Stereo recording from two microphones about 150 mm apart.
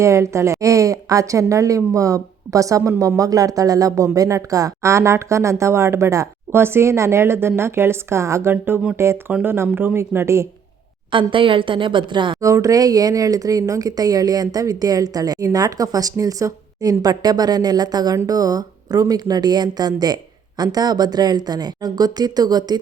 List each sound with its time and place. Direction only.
0.0 s speech: 20° right (ahead or behind)
11.1 s a woman's voice: 35° right (ahead or behind)
12.4 s speech: 20° right (ahead or behind)